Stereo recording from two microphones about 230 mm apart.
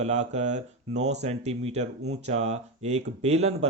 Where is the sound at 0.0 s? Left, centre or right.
Right.